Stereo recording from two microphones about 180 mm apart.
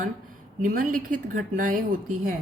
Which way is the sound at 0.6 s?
50° right (ahead or behind).